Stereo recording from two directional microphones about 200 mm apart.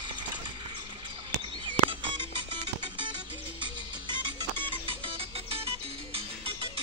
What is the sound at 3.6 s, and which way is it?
Music, 25° right (ahead or behind).